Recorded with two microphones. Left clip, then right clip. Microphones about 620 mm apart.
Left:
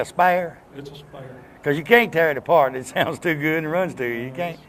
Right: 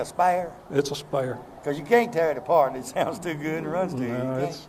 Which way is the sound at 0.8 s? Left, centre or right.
Right.